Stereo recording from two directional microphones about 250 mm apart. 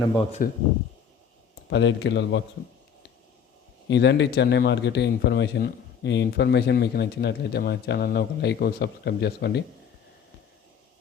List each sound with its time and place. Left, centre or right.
0.2 s speech: left
1.7 s speech: left
3.8 s speech: left